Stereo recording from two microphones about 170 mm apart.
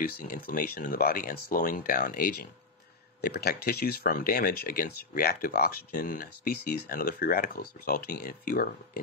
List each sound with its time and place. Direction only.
0.0 s speech: 55° left (ahead or behind)